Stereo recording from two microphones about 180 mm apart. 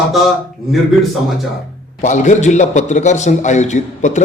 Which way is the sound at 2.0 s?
40° left (ahead or behind).